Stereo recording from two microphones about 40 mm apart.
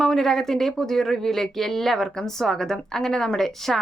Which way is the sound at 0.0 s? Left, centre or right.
Centre.